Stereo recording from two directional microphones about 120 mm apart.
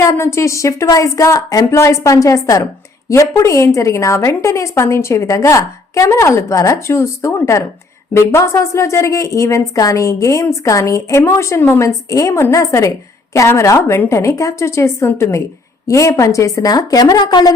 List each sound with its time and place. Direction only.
0.0 s a woman's voice: 25° left (ahead or behind)